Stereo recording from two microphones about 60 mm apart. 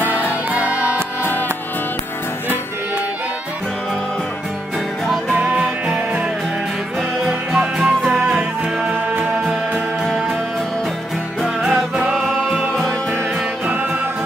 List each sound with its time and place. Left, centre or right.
0.1 s music: right
5.3 s music: right
7.2 s music: centre
11.6 s music: centre